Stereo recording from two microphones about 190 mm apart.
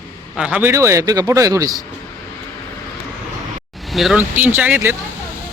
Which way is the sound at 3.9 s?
Centre (ahead or behind).